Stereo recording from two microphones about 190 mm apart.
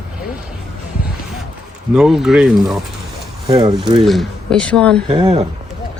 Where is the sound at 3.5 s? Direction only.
20° right (ahead or behind).